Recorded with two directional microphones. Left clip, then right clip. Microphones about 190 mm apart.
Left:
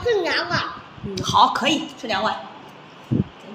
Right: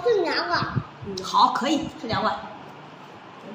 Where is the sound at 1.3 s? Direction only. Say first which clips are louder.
Left 3 dB; 25° left (ahead or behind).